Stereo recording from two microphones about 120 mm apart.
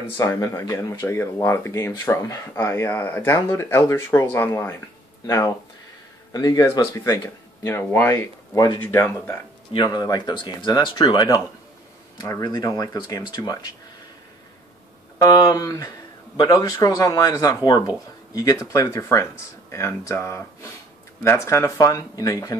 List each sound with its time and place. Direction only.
0.2 s speech: 25° left (ahead or behind)
7.6 s speech: 20° left (ahead or behind)
8.5 s speech: 40° left (ahead or behind)
8.8 s speech: 15° left (ahead or behind)
9.8 s speech: 35° left (ahead or behind)
15.1 s speech: 35° left (ahead or behind)